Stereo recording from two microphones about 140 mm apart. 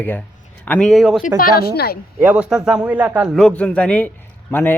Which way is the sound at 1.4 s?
90° left.